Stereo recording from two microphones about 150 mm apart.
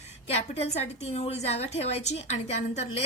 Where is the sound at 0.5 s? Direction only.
40° left (ahead or behind).